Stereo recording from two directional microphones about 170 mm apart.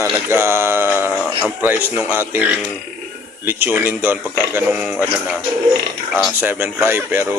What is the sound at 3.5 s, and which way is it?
Speech, 10° right (ahead or behind).